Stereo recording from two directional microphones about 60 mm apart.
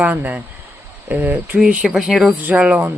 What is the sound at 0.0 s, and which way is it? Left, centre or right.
Speech, right.